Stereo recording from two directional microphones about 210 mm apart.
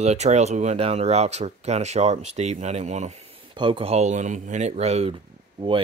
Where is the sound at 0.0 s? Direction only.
30° right (ahead or behind).